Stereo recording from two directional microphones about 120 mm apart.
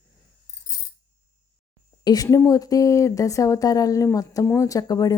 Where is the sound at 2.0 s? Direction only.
30° left (ahead or behind).